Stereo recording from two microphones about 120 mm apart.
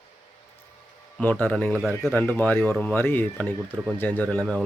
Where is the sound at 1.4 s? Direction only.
15° left (ahead or behind).